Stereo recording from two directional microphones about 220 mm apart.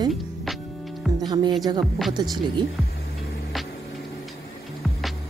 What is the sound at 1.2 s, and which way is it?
Speech, 20° right (ahead or behind).